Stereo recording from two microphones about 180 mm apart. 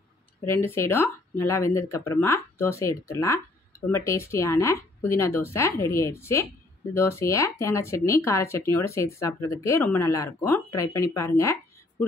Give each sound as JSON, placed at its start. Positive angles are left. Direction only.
{"t": 0.5, "sound": "speech", "side_deg": 15}